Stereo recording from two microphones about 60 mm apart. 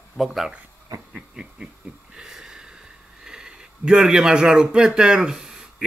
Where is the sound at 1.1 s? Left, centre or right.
Centre.